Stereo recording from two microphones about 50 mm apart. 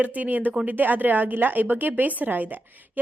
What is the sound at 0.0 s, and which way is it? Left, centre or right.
A woman's voice, right.